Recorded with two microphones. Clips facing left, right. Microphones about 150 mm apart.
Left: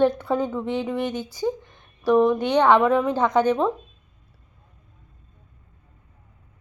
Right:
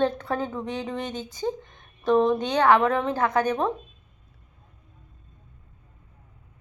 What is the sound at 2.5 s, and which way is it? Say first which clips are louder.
Speech: left 2 dB; 15° left (ahead or behind).